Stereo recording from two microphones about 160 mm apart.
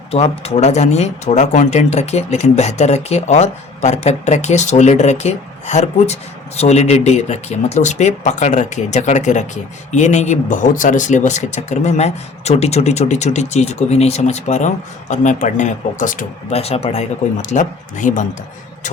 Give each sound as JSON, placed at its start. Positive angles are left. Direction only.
{"t": 0.1, "sound": "speech", "side_deg": 40}
{"t": 17.5, "sound": "speech", "side_deg": 50}